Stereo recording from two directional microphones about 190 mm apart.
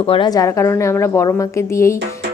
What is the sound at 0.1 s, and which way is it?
A woman's voice, 20° left (ahead or behind).